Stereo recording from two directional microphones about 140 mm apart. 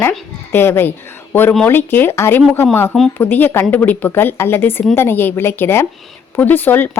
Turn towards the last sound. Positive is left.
turn(degrees=15)  # may be behind; listen again after turning